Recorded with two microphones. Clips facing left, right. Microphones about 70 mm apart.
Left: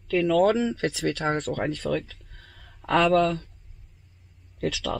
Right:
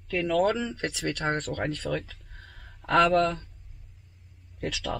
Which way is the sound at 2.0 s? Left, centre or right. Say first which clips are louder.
Right 1 dB; right.